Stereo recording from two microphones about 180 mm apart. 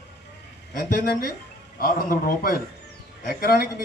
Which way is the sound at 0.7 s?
55° left (ahead or behind).